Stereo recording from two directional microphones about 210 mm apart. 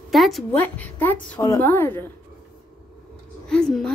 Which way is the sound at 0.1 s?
Centre (ahead or behind).